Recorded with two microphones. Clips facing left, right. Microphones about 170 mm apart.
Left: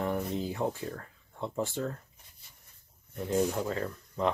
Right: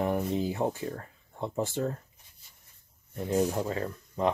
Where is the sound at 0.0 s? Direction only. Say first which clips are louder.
Right 3 dB; 20° right (ahead or behind).